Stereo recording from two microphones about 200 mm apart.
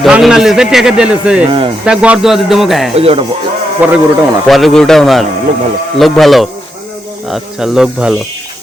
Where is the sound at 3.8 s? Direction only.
5° right (ahead or behind).